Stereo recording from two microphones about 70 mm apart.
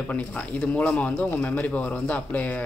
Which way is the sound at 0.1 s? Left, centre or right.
Left.